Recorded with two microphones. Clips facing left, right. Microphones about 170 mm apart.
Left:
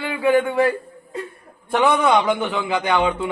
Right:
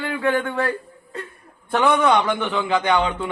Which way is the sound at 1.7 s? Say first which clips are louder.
Left 1 dB; 10° left (ahead or behind).